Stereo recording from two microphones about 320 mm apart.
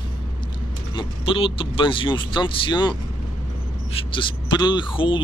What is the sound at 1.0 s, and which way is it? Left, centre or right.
Speech, centre.